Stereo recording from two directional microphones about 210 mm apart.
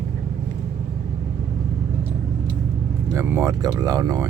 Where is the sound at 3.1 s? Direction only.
15° right (ahead or behind).